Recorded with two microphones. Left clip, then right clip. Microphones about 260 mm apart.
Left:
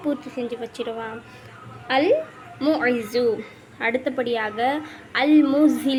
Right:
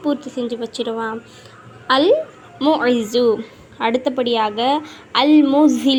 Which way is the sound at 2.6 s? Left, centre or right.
Centre.